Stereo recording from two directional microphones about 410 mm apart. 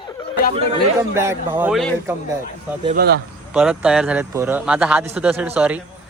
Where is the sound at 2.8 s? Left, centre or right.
Right.